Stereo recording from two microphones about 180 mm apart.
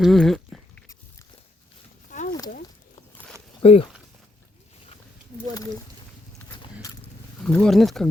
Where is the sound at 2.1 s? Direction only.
45° left (ahead or behind).